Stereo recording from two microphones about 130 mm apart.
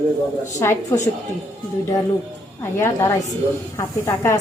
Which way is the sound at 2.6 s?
20° left (ahead or behind).